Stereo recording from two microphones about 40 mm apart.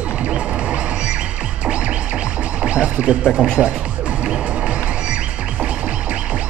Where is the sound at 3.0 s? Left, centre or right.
Right.